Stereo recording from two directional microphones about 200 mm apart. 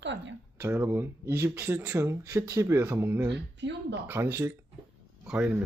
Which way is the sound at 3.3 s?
60° right (ahead or behind).